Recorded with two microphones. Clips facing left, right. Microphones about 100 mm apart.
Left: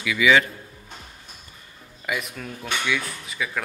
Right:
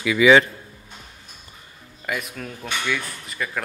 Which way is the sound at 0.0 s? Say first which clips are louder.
Right 4 dB; 35° right (ahead or behind).